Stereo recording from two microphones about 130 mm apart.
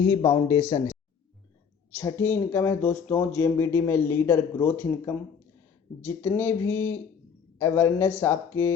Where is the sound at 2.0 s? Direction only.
20° left (ahead or behind).